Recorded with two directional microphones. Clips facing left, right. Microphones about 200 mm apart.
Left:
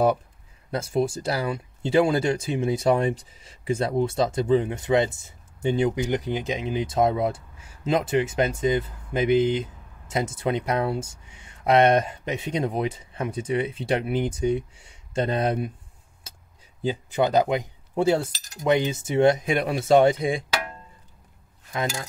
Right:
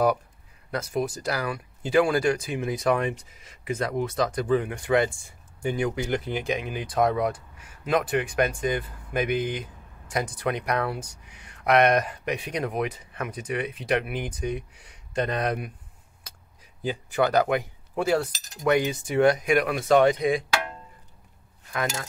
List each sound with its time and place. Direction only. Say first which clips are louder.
0.7 s speech: left 3 dB; 25° left (ahead or behind)
16.8 s cutlery: left 1 dB; 20° left (ahead or behind)
18.6 s speech: left 1 dB; 25° left (ahead or behind)